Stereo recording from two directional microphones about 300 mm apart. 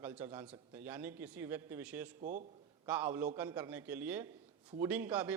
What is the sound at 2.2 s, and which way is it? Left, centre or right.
Speech, right.